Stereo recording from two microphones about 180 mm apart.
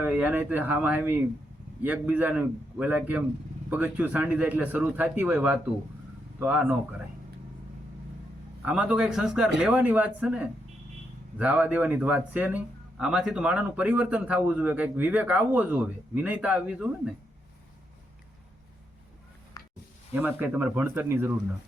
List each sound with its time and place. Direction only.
0.0 s speech: 10° right (ahead or behind)
8.6 s speech: 5° right (ahead or behind)
19.6 s a sound: 20° left (ahead or behind)
20.1 s speech: 10° right (ahead or behind)